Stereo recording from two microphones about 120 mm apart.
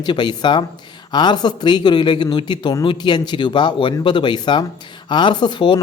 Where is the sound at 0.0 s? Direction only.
40° left (ahead or behind).